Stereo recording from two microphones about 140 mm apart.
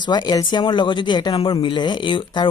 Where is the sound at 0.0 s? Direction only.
30° left (ahead or behind).